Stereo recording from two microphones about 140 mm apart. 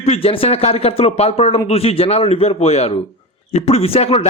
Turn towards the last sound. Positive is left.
turn(degrees=45)  # may be behind; listen again after turning